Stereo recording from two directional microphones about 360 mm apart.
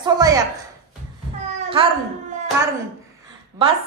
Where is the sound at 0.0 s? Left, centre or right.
Centre.